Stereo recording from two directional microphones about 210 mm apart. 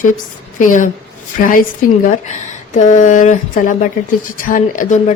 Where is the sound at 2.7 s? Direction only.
35° left (ahead or behind).